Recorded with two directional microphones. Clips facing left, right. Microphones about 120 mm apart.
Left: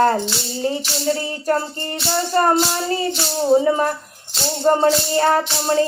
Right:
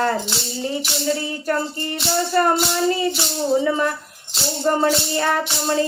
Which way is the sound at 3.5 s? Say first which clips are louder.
Left 4 dB; 35° left (ahead or behind).